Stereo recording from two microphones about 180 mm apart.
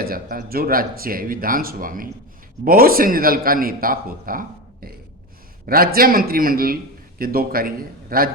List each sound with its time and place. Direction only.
0.0 s a man's voice: 55° right (ahead or behind)